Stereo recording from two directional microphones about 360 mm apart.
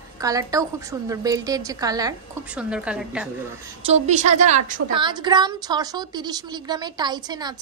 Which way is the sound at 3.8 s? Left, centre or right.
Centre.